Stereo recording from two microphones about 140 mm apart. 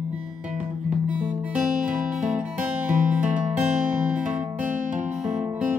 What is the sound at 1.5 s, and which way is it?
Music, 10° right (ahead or behind).